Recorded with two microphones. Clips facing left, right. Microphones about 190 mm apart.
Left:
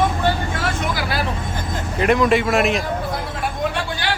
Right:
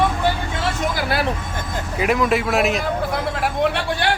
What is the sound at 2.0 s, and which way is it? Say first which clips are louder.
Speech: left 3 dB; 5° right (ahead or behind).